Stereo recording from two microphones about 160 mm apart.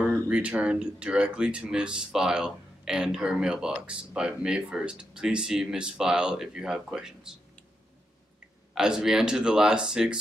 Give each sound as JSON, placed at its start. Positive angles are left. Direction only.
{"t": 0.3, "sound": "speech", "side_deg": -10}
{"t": 8.7, "sound": "speech", "side_deg": -5}